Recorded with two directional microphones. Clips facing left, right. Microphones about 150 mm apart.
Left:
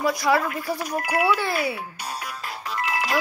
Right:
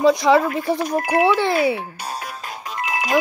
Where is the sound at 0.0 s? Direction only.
20° right (ahead or behind).